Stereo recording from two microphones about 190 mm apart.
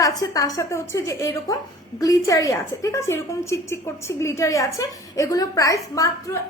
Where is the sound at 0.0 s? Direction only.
20° left (ahead or behind).